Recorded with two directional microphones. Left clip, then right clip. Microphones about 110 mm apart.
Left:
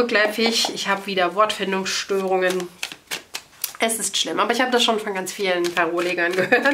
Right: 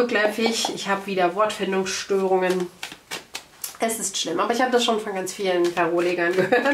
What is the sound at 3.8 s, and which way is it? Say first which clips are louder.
Speech: left 3 dB; 40° left (ahead or behind).